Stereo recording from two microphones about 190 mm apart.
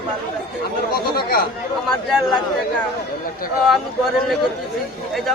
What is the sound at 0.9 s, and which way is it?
Speech, 50° left (ahead or behind).